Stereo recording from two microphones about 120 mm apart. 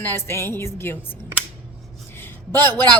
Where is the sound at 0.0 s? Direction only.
20° left (ahead or behind).